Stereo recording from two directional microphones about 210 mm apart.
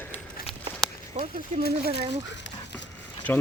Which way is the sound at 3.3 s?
10° left (ahead or behind).